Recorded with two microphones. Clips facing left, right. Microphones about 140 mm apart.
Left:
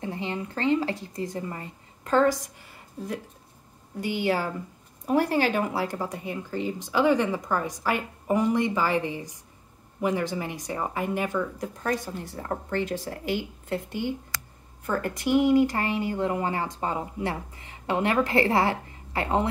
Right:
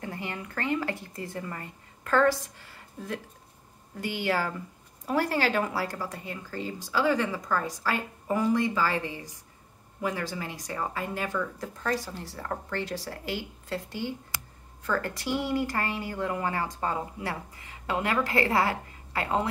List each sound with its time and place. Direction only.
0.0 s a woman's voice: 20° left (ahead or behind)
4.0 s a woman's voice: 20° left (ahead or behind)